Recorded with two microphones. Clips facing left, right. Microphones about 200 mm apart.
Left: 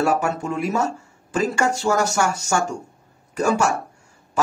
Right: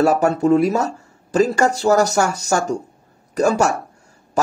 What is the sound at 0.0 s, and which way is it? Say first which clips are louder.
Speech: right 6 dB; 35° right (ahead or behind).